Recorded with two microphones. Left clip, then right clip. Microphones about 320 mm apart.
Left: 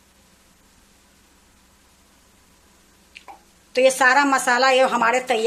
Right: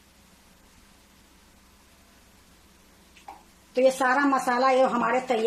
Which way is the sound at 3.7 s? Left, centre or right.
Left.